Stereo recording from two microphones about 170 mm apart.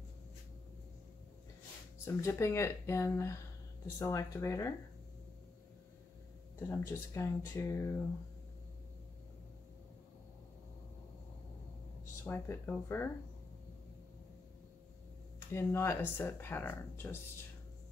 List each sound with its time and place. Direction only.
2.0 s speech: 15° left (ahead or behind)
6.7 s speech: 15° left (ahead or behind)
12.3 s speech: 15° left (ahead or behind)
15.5 s speech: 15° left (ahead or behind)